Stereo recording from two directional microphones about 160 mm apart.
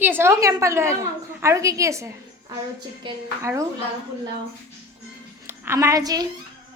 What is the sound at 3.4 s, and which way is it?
Speech, 20° right (ahead or behind).